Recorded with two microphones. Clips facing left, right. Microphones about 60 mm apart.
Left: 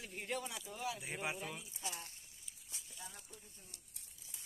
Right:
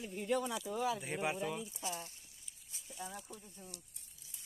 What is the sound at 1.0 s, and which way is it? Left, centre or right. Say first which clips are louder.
Speech: right 5 dB; centre.